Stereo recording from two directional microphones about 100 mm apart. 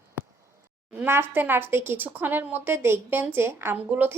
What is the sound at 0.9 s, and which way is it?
Speech, 25° right (ahead or behind).